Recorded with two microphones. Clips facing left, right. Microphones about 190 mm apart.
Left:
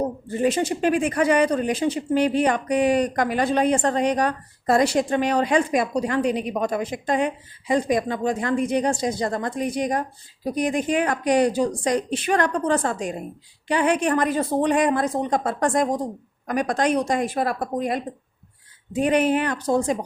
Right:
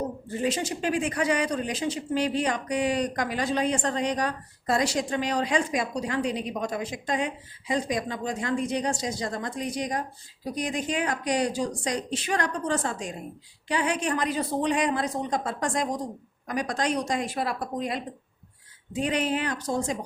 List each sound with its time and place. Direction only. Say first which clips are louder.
0.3 s speech: left 6 dB; 55° left (ahead or behind)